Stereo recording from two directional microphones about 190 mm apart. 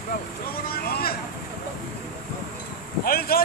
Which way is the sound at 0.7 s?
50° left (ahead or behind).